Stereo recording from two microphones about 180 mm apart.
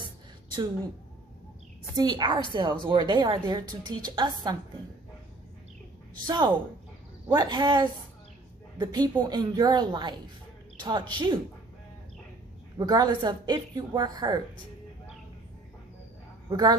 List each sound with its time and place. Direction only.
2.0 s a woman's voice: 25° right (ahead or behind)
6.2 s a woman's voice: 25° right (ahead or behind)
12.8 s a woman's voice: 20° right (ahead or behind)
16.5 s speech: 20° right (ahead or behind)